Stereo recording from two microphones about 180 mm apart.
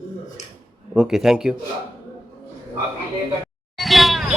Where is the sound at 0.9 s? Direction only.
5° right (ahead or behind).